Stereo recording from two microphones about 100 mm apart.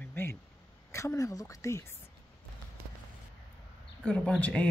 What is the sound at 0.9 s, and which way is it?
A woman's voice, 35° left (ahead or behind).